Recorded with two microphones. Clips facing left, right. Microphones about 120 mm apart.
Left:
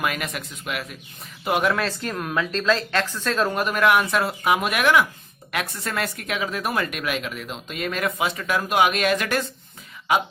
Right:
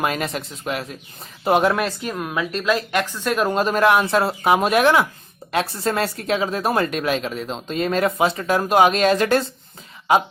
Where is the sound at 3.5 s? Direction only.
30° right (ahead or behind).